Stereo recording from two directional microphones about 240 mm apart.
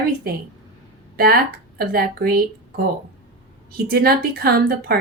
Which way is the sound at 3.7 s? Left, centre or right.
Right.